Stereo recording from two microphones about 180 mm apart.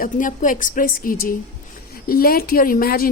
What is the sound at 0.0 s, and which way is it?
A woman's voice, 45° left (ahead or behind).